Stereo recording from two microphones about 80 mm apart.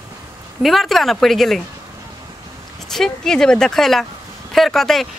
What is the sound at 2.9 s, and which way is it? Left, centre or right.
Speech, centre.